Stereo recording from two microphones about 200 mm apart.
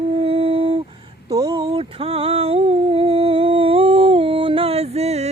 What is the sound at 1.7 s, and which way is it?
Humming, 30° right (ahead or behind).